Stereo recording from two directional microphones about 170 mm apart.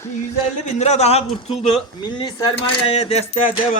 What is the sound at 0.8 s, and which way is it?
Speech, 40° left (ahead or behind).